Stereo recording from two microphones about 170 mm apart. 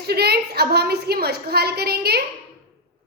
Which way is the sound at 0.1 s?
70° right (ahead or behind).